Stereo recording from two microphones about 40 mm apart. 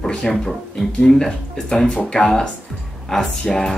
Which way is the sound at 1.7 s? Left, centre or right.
Left.